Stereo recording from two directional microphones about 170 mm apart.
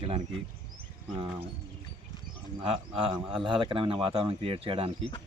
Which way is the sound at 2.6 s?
35° right (ahead or behind).